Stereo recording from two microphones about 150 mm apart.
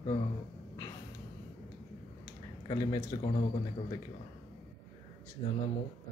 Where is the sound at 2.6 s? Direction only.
25° left (ahead or behind).